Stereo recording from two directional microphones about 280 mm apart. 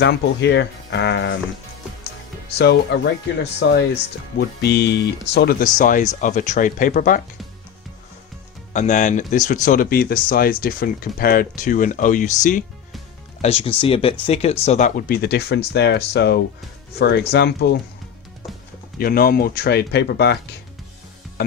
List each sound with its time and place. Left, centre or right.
0.0 s speech: left
2.6 s speech: left
8.7 s speech: left
18.9 s speech: left